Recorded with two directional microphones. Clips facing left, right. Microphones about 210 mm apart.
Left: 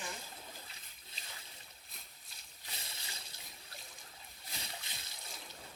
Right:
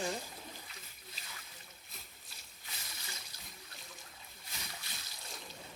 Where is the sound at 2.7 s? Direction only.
30° left (ahead or behind).